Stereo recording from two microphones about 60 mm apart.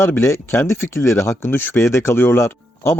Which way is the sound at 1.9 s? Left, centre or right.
Left.